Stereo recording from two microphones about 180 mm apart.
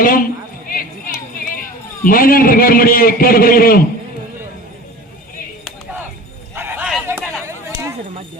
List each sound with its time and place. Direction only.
0.0 s a man's voice: 50° left (ahead or behind)
0.7 s run: 50° left (ahead or behind)
2.0 s a man's voice: 50° left (ahead or behind)
6.6 s a sound: 10° right (ahead or behind)